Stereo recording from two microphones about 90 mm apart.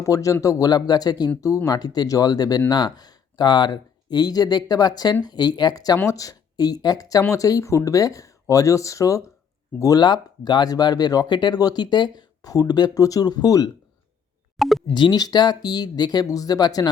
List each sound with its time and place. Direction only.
0.0 s speech: 40° left (ahead or behind)
10.0 s speech: 50° left (ahead or behind)
14.6 s speech: centre (ahead or behind)
14.8 s speech: 60° left (ahead or behind)